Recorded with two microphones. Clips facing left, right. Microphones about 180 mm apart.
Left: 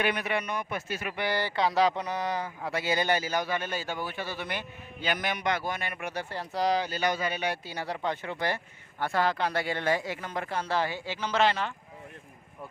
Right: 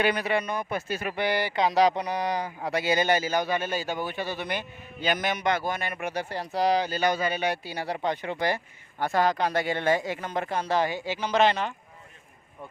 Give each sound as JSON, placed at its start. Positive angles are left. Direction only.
{"t": 0.0, "sound": "a man's voice", "side_deg": -35}
{"t": 1.2, "sound": "speech", "side_deg": -15}
{"t": 5.3, "sound": "a man's voice", "side_deg": -40}
{"t": 6.0, "sound": "speech", "side_deg": -20}
{"t": 6.8, "sound": "a man's voice", "side_deg": -40}
{"t": 7.6, "sound": "speech", "side_deg": -10}